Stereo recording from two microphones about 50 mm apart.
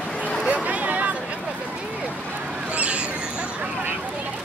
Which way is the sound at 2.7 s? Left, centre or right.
Right.